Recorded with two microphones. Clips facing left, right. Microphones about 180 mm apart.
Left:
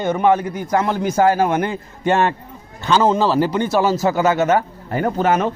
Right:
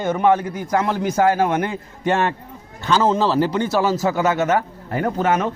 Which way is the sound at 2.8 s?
20° left (ahead or behind).